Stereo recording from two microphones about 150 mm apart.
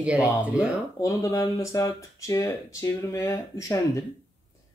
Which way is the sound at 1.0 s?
20° left (ahead or behind).